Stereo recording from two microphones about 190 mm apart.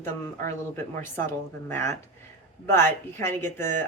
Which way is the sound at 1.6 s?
15° left (ahead or behind).